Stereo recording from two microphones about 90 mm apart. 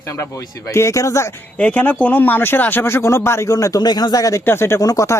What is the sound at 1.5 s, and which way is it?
Speech, 20° left (ahead or behind).